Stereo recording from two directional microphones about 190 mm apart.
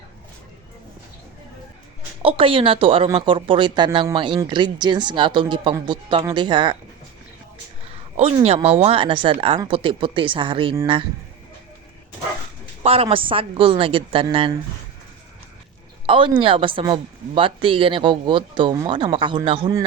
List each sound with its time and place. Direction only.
2.2 s speech: 30° right (ahead or behind)
7.9 s speech: 30° right (ahead or behind)
12.8 s speech: 30° right (ahead or behind)
16.0 s speech: 25° right (ahead or behind)